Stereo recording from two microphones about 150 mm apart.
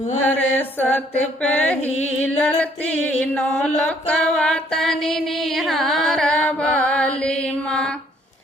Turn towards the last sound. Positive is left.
turn(degrees=5)  # may be behind; listen again after turning